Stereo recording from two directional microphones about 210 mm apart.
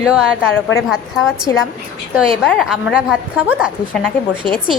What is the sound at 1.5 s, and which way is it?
Speech, 15° left (ahead or behind).